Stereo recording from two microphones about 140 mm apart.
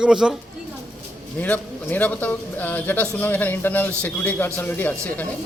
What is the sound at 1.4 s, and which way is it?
A man's voice, 10° left (ahead or behind).